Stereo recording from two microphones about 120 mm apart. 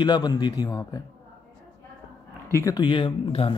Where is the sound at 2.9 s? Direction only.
45° left (ahead or behind).